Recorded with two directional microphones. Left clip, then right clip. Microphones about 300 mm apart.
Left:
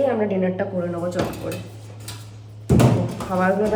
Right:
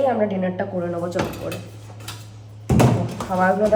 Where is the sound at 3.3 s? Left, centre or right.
Centre.